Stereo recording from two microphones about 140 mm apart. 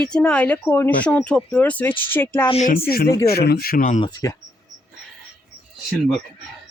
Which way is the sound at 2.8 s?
90° left.